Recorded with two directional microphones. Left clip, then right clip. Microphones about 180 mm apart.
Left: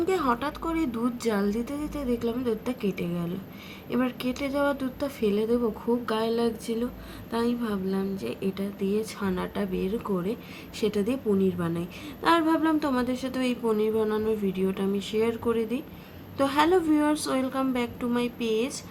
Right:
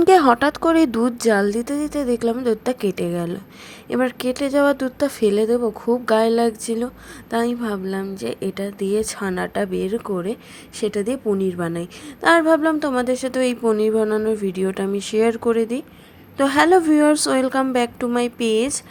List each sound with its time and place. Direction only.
0.0 s a woman's voice: 50° right (ahead or behind)